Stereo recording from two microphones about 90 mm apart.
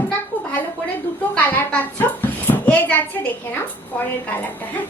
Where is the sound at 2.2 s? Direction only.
20° left (ahead or behind).